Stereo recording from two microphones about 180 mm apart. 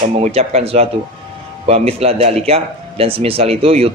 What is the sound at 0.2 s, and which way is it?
Speech, 35° right (ahead or behind).